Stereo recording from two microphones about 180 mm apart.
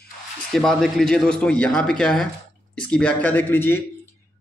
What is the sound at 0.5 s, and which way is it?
A man's voice, centre (ahead or behind).